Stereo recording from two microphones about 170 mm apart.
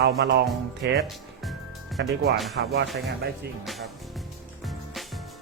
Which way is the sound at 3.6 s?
Centre (ahead or behind).